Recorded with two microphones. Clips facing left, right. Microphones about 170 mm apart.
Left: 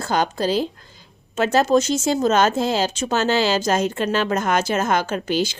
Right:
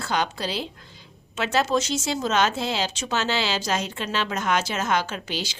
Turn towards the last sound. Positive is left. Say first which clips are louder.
# left 9 dB
turn(degrees=50)  # may be behind; listen again after turning